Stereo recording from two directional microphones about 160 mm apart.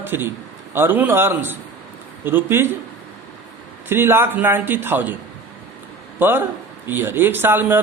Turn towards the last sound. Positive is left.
turn(degrees=-15)  # may be behind; listen again after turning